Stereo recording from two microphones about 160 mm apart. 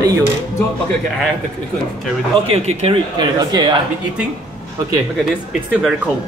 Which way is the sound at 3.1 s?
25° right (ahead or behind).